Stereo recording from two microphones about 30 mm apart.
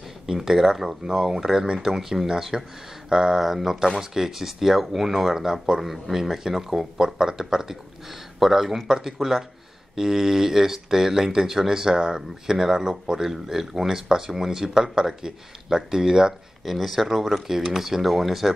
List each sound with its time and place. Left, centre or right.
0.3 s speech: centre
2.2 s speech: centre
3.3 s speech: centre
4.0 s speech: centre
5.8 s speech: centre
16.6 s speech: centre